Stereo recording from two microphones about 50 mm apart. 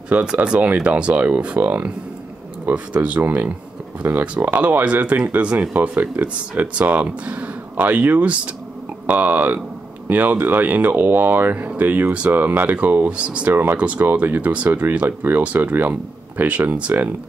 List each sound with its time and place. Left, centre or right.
0.1 s speech: centre
0.4 s speech: right
1.6 s speech: right
2.7 s speech: right
13.1 s speech: right
13.5 s speech: right